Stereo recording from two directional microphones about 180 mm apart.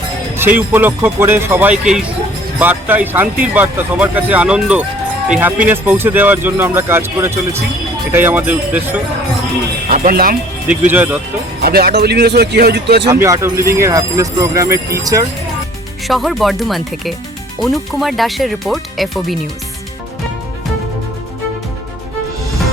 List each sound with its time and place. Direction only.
0.3 s speech: 10° right (ahead or behind)
9.9 s speech: 50° right (ahead or behind)
10.7 s speech: 10° right (ahead or behind)
11.6 s speech: 60° right (ahead or behind)
13.1 s speech: 15° right (ahead or behind)
16.0 s speech: centre (ahead or behind)